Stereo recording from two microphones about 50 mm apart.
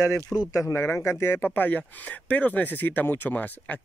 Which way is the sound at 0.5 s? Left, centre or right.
Left.